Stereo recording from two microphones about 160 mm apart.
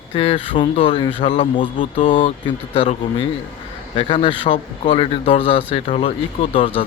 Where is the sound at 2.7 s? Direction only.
35° left (ahead or behind).